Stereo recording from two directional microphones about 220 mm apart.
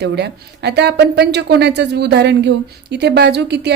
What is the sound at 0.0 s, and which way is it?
Speech, 50° right (ahead or behind).